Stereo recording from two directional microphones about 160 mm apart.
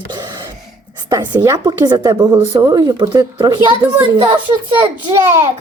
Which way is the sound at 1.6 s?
25° right (ahead or behind).